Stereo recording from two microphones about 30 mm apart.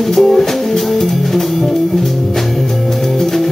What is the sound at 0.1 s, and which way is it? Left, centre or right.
Music, centre.